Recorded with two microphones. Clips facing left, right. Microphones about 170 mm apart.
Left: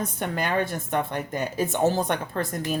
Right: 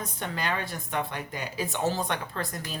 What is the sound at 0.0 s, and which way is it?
A woman's voice, 50° left (ahead or behind).